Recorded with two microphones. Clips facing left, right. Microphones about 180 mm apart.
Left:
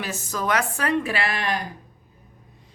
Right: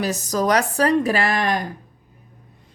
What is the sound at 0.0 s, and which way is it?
Speech, 40° right (ahead or behind).